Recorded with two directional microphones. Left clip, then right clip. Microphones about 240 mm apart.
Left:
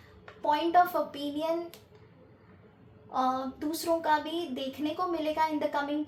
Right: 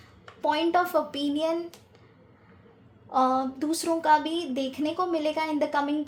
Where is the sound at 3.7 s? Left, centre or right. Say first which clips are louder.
Right 4 dB; right.